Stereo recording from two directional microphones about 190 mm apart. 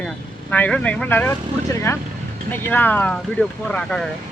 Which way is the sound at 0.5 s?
10° left (ahead or behind).